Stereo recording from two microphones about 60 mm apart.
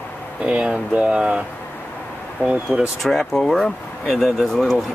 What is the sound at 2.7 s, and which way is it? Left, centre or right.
Speech, centre.